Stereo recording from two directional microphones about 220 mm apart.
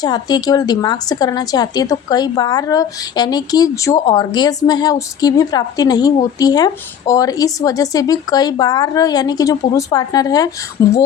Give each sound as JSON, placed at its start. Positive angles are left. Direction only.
{"t": 0.0, "sound": "a woman's voice", "side_deg": 20}